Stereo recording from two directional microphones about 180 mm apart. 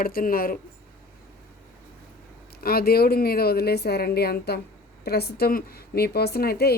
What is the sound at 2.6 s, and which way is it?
A woman's voice, 55° left (ahead or behind).